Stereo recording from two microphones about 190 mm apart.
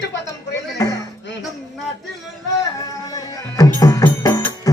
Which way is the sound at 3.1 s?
20° left (ahead or behind).